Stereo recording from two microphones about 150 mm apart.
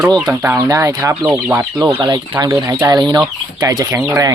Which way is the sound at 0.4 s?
20° right (ahead or behind).